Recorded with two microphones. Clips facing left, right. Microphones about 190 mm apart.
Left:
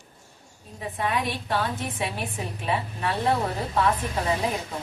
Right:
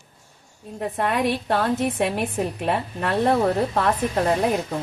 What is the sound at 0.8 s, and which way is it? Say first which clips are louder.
Speech: right 5 dB; 60° right (ahead or behind).